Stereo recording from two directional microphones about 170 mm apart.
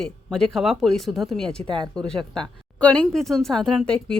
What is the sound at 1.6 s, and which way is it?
Speech, 30° right (ahead or behind).